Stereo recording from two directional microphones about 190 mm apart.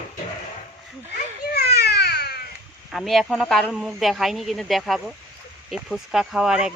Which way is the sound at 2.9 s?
Centre (ahead or behind).